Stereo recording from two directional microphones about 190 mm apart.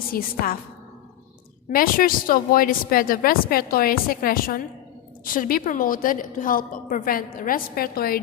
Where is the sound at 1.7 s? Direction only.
50° left (ahead or behind).